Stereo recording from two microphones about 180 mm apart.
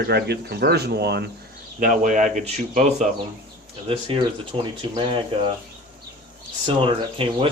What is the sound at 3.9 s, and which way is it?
Speech, 30° right (ahead or behind).